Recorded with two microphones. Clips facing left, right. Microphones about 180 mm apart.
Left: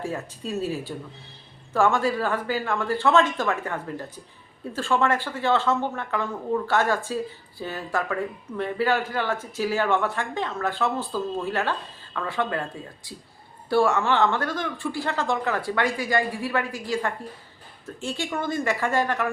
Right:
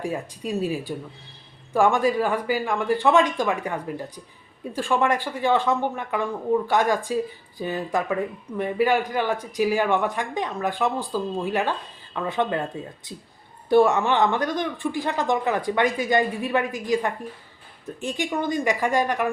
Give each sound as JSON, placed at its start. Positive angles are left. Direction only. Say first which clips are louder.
{"t": 0.0, "sound": "speech", "louder": "right 2 dB", "side_deg": -15}
{"t": 13.7, "sound": "speech", "louder": "right 3 dB", "side_deg": -20}